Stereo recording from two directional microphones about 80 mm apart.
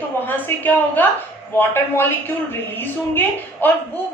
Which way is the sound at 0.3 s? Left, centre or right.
Left.